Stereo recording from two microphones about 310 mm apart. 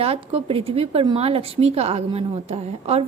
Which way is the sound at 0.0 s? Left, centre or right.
Centre.